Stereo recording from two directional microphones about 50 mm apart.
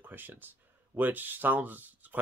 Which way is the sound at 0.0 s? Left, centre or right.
Right.